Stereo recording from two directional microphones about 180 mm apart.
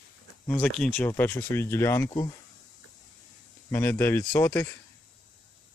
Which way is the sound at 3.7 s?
10° left (ahead or behind).